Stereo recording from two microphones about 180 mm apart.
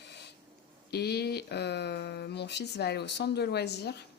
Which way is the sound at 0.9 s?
65° left (ahead or behind).